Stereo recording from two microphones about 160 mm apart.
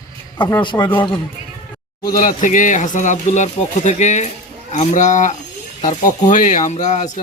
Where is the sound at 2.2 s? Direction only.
55° left (ahead or behind).